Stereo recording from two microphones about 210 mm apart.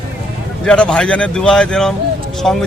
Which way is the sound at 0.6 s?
5° left (ahead or behind).